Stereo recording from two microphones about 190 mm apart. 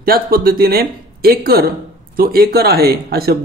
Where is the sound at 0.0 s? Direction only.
50° right (ahead or behind).